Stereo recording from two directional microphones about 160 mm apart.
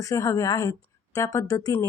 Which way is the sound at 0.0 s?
20° left (ahead or behind).